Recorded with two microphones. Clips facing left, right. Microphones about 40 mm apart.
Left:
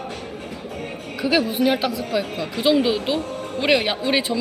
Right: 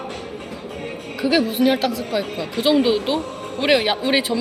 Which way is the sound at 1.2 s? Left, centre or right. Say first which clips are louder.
Right 2 dB; centre.